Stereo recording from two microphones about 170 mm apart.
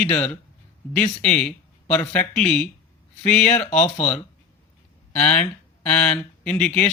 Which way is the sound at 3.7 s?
40° left (ahead or behind).